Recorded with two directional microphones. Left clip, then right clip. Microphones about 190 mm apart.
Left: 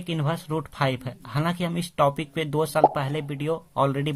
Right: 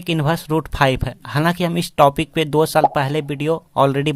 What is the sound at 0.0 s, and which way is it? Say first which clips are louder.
Speech: right 9 dB; 30° right (ahead or behind).